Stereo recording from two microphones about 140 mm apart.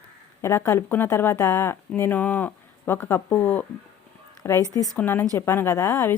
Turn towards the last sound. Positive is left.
turn(degrees=20)  # may be behind; listen again after turning